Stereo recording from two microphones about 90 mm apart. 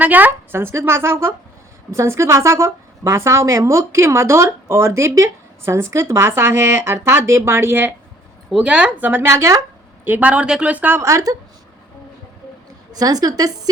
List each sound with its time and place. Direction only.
0.0 s a woman's voice: 20° right (ahead or behind)
8.5 s speech: 15° right (ahead or behind); by 9.6 s 30° right (ahead or behind)
10.0 s a woman's voice: 20° right (ahead or behind)
11.0 s a woman's voice: 40° right (ahead or behind)
12.9 s speech: 45° right (ahead or behind)